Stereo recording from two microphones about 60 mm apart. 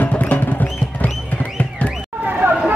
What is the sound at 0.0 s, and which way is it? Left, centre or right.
Music, left.